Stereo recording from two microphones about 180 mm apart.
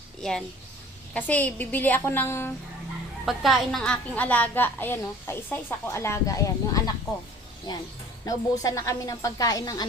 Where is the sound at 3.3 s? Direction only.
Centre (ahead or behind); by 6.9 s 20° left (ahead or behind).